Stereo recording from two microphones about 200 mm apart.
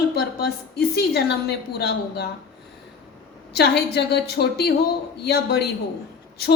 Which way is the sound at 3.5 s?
55° left (ahead or behind).